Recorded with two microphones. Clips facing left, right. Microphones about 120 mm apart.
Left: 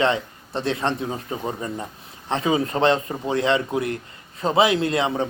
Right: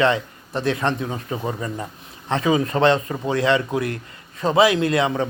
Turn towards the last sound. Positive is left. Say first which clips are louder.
# right 2 dB
turn(degrees=30)  # may be behind; listen again after turning